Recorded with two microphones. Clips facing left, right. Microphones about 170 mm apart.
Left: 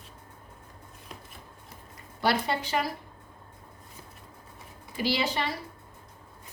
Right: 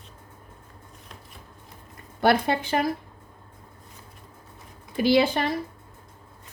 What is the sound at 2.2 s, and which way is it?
Speech, 55° right (ahead or behind).